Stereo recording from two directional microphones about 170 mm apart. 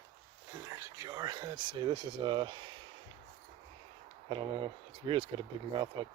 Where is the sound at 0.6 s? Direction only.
20° right (ahead or behind).